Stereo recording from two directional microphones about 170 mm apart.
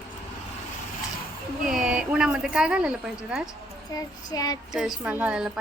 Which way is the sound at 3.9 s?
20° left (ahead or behind).